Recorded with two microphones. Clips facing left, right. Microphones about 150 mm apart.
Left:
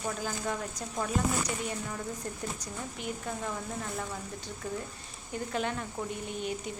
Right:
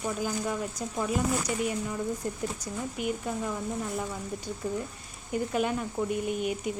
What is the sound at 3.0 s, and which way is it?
Speech, 10° right (ahead or behind).